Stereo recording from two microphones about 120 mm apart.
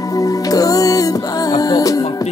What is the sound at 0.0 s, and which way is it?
Music, 30° left (ahead or behind).